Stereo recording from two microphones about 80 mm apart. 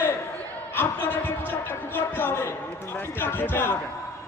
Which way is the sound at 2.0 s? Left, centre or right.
Left.